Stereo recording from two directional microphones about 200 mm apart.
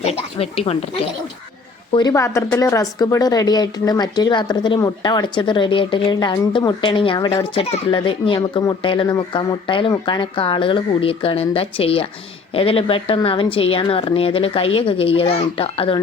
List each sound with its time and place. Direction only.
0.0 s speech: 30° left (ahead or behind)
1.9 s speech: 20° left (ahead or behind)